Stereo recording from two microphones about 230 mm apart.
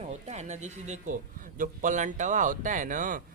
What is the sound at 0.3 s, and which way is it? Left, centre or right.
Speech, right.